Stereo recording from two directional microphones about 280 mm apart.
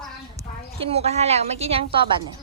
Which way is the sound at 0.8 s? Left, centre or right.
Right.